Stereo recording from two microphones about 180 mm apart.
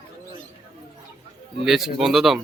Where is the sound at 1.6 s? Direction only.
Centre (ahead or behind).